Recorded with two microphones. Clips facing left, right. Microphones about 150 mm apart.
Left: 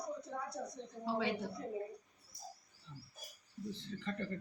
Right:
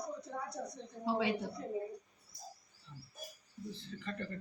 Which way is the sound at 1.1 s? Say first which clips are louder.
Right 3 dB; 10° right (ahead or behind).